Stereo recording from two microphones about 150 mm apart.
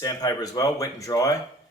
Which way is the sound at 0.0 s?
25° left (ahead or behind).